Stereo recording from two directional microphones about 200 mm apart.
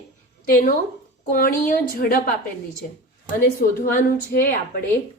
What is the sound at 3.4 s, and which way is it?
A woman's voice, 45° left (ahead or behind).